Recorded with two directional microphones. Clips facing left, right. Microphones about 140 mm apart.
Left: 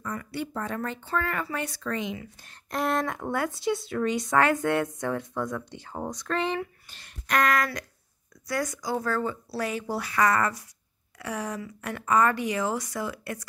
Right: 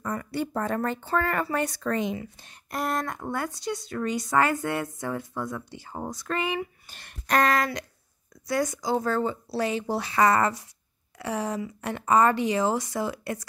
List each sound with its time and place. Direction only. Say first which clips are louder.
0.0 s speech: right 3 dB; 40° right (ahead or behind)
2.7 s speech: left 2 dB; centre (ahead or behind)
6.9 s a sound: right 3 dB; 55° right (ahead or behind)
7.2 s speech: right 2 dB; 30° right (ahead or behind)